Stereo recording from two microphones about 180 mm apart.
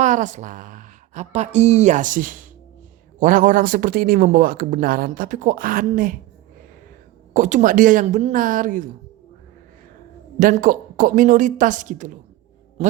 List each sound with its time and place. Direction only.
0.0 s speech: 45° right (ahead or behind)
7.3 s speech: 45° right (ahead or behind)
10.4 s speech: 50° right (ahead or behind)
12.8 s a sound: 35° right (ahead or behind)